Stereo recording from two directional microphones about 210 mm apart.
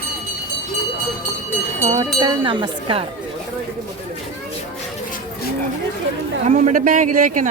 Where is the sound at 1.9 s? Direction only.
20° right (ahead or behind).